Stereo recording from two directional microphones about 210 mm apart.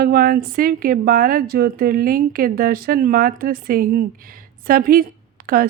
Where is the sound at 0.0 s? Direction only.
45° right (ahead or behind).